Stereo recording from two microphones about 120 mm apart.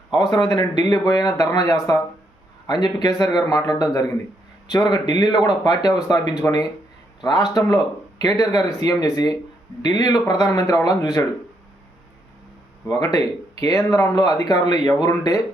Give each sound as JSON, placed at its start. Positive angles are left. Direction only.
{"t": 0.1, "sound": "speech", "side_deg": 35}
{"t": 12.9, "sound": "speech", "side_deg": 30}